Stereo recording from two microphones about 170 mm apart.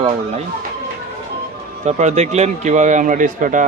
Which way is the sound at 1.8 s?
40° right (ahead or behind).